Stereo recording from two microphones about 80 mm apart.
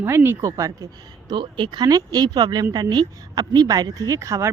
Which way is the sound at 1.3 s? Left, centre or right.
Right.